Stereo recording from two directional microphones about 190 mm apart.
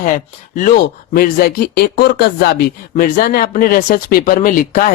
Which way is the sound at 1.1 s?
55° left (ahead or behind).